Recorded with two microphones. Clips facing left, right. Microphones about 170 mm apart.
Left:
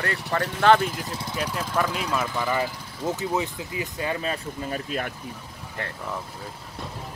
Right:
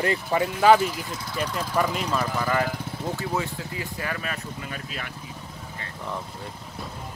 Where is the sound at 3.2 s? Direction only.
20° left (ahead or behind).